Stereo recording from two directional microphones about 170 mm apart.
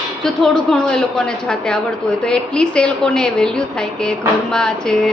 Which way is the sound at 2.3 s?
5° left (ahead or behind).